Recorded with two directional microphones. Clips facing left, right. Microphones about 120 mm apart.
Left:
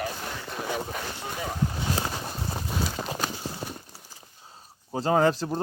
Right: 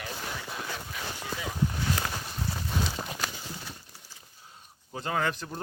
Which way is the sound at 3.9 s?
35° left (ahead or behind).